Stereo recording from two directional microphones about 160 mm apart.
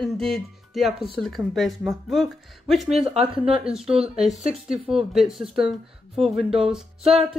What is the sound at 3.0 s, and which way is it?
Speech, 35° right (ahead or behind).